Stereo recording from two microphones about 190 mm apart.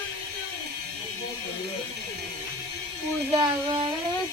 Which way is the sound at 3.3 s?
25° right (ahead or behind).